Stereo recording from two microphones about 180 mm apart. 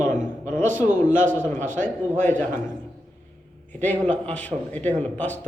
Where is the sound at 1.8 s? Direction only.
10° left (ahead or behind).